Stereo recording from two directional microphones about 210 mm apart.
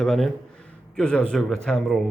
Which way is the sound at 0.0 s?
5° left (ahead or behind).